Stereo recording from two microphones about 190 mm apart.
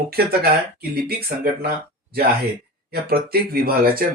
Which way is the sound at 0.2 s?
55° right (ahead or behind).